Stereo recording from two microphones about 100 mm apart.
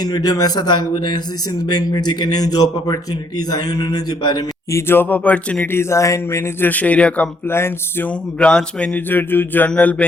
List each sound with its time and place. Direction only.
0.0 s speech: 40° left (ahead or behind)
4.7 s speech: 20° left (ahead or behind)
5.7 s speech: 30° left (ahead or behind)
6.7 s speech: 15° left (ahead or behind)
7.4 s speech: 25° left (ahead or behind)
8.4 s speech: 10° left (ahead or behind)